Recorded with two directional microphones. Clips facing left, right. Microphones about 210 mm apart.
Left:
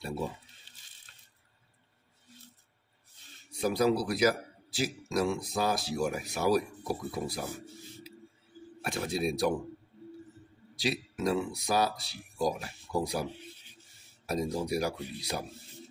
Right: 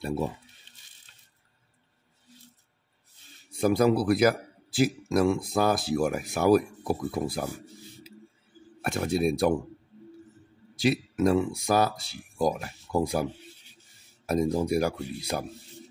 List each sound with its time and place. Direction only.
3.6 s speech: 55° right (ahead or behind)
8.8 s speech: 50° right (ahead or behind)
10.8 s speech: 55° right (ahead or behind)